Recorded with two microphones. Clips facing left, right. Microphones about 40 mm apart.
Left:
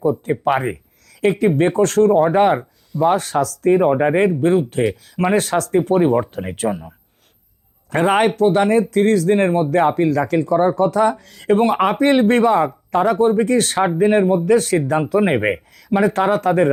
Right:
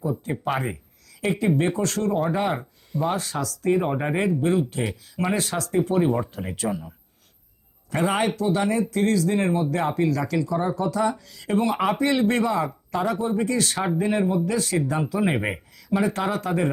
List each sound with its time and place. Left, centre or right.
0.3 s speech: left
3.8 s speech: left
4.2 s speech: left